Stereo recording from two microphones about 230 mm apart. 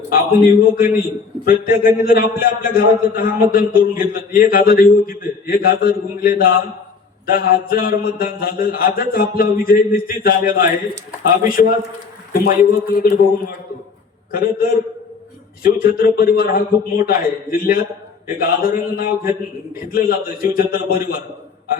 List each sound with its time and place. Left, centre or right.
0.1 s a man's voice: left
14.3 s a man's voice: left